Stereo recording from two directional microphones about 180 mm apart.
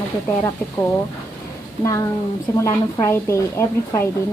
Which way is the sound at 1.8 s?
20° left (ahead or behind).